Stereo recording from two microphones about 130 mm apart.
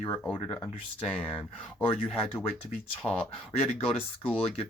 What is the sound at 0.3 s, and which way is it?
Speech, 40° left (ahead or behind).